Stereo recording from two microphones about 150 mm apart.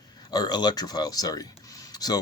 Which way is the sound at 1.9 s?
25° left (ahead or behind).